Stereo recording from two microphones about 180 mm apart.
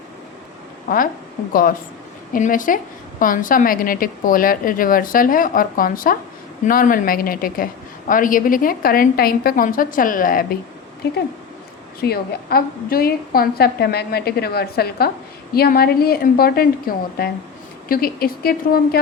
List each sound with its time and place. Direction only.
2.3 s a woman's voice: 50° left (ahead or behind)
11.9 s a woman's voice: 60° left (ahead or behind)